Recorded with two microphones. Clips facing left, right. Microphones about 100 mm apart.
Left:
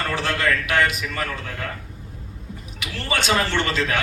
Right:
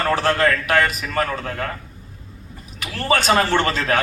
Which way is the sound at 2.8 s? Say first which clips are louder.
Right 6 dB; 40° right (ahead or behind).